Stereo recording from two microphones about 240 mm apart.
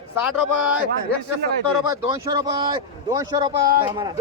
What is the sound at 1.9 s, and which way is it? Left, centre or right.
Speech, centre.